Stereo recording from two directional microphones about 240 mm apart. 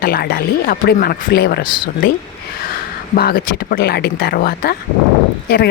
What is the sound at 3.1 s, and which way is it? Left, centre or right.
Speech, left.